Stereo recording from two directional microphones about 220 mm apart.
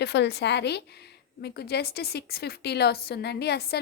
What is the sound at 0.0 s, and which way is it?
A woman's voice, 50° left (ahead or behind).